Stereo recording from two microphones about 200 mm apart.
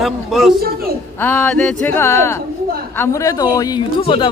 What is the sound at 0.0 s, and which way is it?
Speech, centre (ahead or behind).